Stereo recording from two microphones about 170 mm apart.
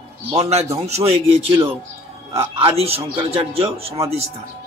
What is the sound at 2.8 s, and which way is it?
A man's voice, 35° right (ahead or behind).